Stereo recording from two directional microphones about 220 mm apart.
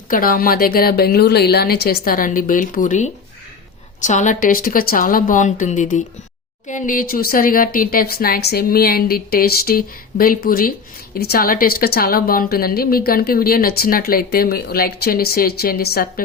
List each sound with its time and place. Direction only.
0.1 s a woman's voice: 40° left (ahead or behind)